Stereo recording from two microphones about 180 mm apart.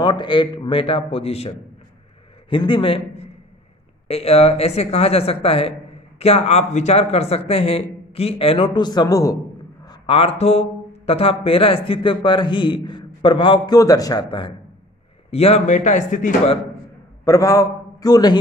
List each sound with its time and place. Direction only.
0.0 s speech: 25° left (ahead or behind)
2.5 s a man's voice: 30° left (ahead or behind)
9.8 s speech: 30° left (ahead or behind)
15.3 s speech: 35° left (ahead or behind)
17.2 s a man's voice: 15° left (ahead or behind)